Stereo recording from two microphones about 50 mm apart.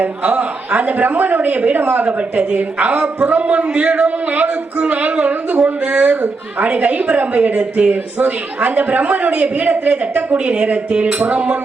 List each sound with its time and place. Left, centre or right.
0.0 s a man's voice: right